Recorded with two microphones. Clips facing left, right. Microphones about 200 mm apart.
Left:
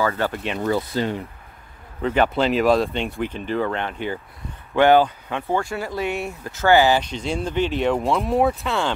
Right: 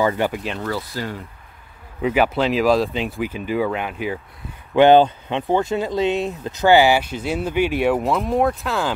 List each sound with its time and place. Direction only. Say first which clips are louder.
0.0 s speech: right 3 dB; 15° right (ahead or behind)
0.6 s speech: left 4 dB; 20° left (ahead or behind)
2.0 s speech: right 1 dB; 10° right (ahead or behind)
4.7 s speech: right 3 dB; 20° right (ahead or behind); by 8.9 s centre (ahead or behind)